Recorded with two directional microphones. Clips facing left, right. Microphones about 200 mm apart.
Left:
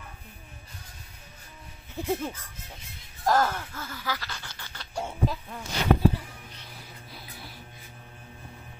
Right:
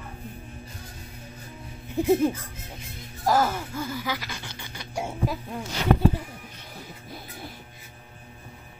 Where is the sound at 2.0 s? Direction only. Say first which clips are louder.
Right 9 dB; 15° right (ahead or behind).